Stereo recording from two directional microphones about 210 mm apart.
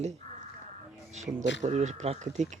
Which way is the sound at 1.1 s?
35° right (ahead or behind).